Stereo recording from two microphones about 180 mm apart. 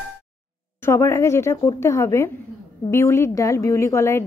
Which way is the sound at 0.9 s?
15° left (ahead or behind).